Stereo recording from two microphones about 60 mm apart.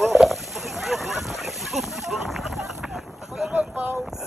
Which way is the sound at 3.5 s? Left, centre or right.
Right.